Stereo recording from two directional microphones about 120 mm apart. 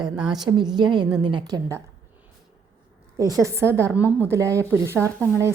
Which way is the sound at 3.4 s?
20° right (ahead or behind).